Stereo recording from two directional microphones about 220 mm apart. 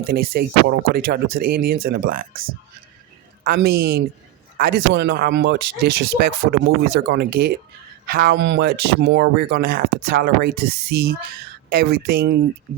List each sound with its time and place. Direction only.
0.0 s speech: 45° right (ahead or behind)
3.4 s speech: 45° right (ahead or behind)